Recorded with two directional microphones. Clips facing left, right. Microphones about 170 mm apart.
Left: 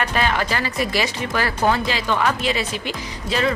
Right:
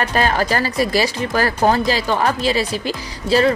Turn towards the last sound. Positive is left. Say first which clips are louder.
# right 7 dB
turn(degrees=-35)  # may be behind; listen again after turning